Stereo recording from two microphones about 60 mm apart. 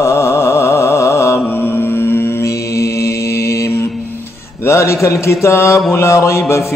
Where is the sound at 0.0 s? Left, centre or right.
Left.